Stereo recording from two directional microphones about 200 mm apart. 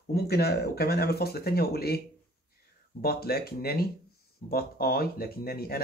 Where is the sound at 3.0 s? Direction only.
50° left (ahead or behind).